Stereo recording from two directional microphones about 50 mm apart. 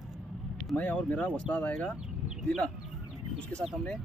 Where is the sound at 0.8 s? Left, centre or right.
Left.